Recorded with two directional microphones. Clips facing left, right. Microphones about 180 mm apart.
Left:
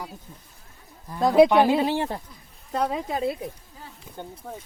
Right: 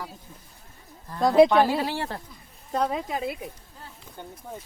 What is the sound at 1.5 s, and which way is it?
Speech, 15° left (ahead or behind).